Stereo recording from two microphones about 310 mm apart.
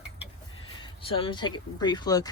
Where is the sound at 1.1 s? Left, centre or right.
Centre.